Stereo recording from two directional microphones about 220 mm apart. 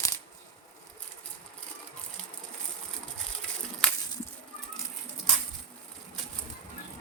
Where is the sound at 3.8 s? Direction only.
Centre (ahead or behind).